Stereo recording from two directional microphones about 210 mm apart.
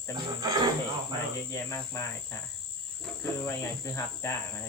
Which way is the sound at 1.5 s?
15° left (ahead or behind).